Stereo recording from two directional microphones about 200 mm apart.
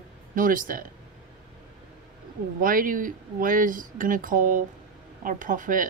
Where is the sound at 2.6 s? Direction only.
45° right (ahead or behind).